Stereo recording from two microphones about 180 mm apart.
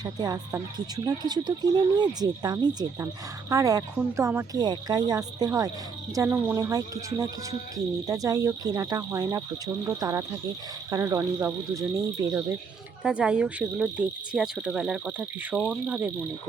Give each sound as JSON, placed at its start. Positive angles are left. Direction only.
{"t": 0.0, "sound": "speech", "side_deg": -20}
{"t": 13.0, "sound": "cricket", "side_deg": -5}
{"t": 15.5, "sound": "cricket", "side_deg": 5}
{"t": 15.9, "sound": "speech", "side_deg": -10}